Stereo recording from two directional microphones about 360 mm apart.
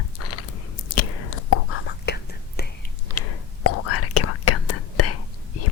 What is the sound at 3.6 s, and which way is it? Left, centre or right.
Whispering, left.